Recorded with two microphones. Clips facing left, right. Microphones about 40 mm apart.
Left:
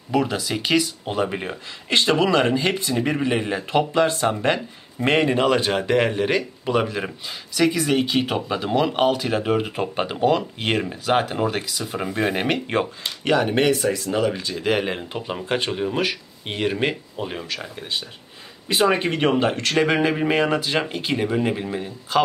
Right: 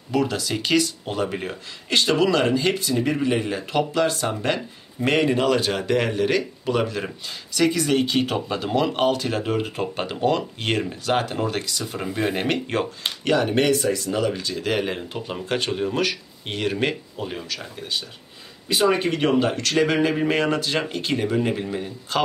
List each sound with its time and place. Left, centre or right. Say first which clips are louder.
0.1 s speech: left 1 dB; centre